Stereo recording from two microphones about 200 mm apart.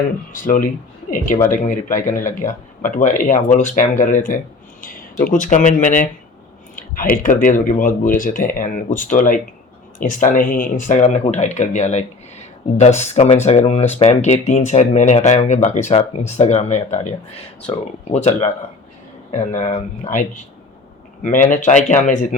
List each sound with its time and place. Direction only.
0.3 s speech: 40° left (ahead or behind)